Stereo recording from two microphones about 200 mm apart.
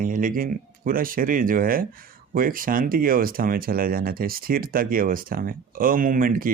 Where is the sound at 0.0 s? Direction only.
40° right (ahead or behind).